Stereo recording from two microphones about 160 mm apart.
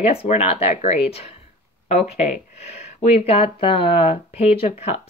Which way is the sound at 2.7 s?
40° left (ahead or behind).